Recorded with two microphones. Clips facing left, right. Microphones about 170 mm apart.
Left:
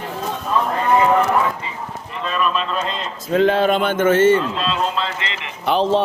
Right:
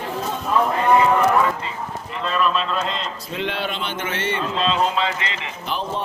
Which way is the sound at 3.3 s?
45° left (ahead or behind).